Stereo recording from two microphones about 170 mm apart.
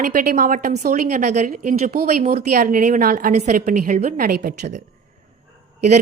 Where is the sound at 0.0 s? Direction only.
55° right (ahead or behind).